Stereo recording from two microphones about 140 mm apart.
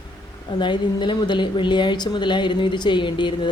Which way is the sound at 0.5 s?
35° left (ahead or behind).